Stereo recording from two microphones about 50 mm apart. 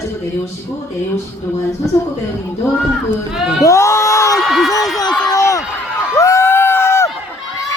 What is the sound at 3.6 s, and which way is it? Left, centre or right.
Speech, left.